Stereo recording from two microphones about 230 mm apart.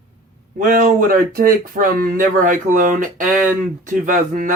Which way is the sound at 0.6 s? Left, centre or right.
Right.